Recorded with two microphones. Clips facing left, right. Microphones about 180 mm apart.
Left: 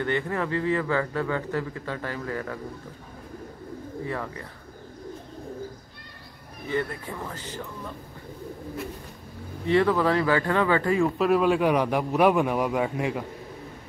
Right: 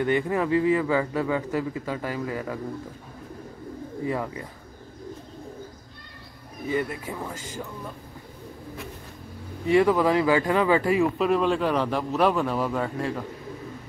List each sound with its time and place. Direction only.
0.0 s a man's voice: 15° right (ahead or behind)
4.1 s a man's voice: 15° right (ahead or behind)
6.7 s a man's voice: 10° right (ahead or behind)
9.7 s a man's voice: 10° right (ahead or behind)
11.1 s a man's voice: 5° left (ahead or behind)